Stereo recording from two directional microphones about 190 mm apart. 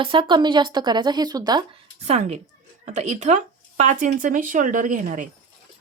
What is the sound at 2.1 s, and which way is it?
A woman's voice, 35° right (ahead or behind).